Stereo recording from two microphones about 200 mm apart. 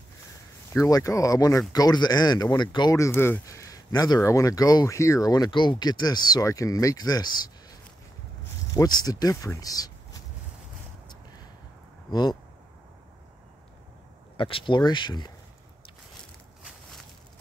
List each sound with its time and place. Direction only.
0.7 s speech: 15° left (ahead or behind)
8.7 s speech: 20° left (ahead or behind)
12.1 s speech: 20° left (ahead or behind)
14.3 s speech: 25° left (ahead or behind)